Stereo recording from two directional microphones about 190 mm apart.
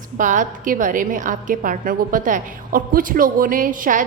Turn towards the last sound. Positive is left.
turn(degrees=-45)  # may be behind; listen again after turning